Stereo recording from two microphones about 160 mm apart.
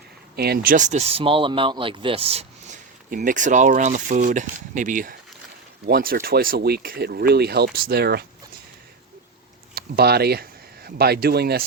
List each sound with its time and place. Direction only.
0.3 s speech: 80° right; by 2.7 s 40° right (ahead or behind)
3.1 s speech: 55° right (ahead or behind); by 8.2 s 85° right
9.7 s speech: 80° right